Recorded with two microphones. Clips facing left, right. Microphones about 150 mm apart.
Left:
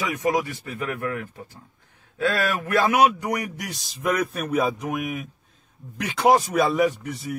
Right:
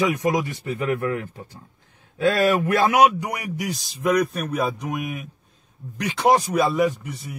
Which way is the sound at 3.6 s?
Centre (ahead or behind).